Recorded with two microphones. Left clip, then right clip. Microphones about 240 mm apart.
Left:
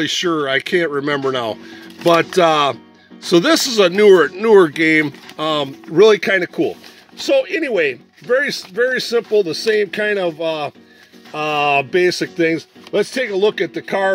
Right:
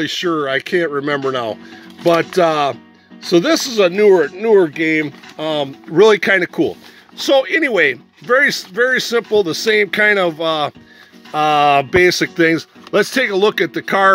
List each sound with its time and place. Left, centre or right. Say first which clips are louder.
0.0 s speech: even; centre
5.9 s speech: right 1 dB; centre